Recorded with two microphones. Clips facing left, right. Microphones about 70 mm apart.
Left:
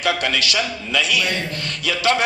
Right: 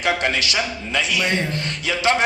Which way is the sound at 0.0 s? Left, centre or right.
Right.